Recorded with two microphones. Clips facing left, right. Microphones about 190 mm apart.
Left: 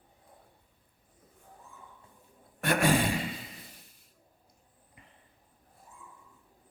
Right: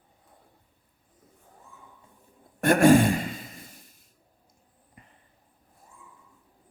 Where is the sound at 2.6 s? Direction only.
45° right (ahead or behind).